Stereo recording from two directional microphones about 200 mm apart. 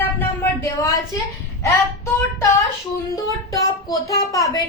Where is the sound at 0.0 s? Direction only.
10° left (ahead or behind).